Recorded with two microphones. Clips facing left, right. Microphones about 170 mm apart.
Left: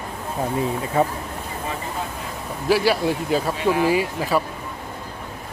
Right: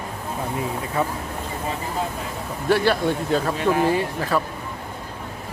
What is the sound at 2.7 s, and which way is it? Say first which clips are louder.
Speech: even; 5° left (ahead or behind).